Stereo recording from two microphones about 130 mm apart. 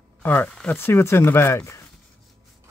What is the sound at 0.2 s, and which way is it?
Speech, 15° left (ahead or behind).